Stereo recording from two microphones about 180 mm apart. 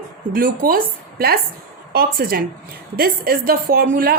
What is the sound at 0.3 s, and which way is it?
Speech, 50° right (ahead or behind).